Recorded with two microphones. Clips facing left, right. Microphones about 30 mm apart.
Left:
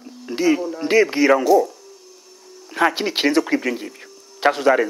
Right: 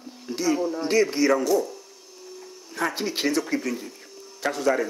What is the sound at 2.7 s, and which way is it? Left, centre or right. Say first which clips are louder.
Speech: left 8 dB; left.